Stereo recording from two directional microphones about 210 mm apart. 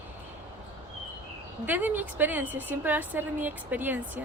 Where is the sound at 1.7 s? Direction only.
10° right (ahead or behind).